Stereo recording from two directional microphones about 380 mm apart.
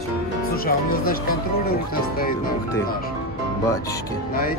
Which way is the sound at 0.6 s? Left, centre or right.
Left.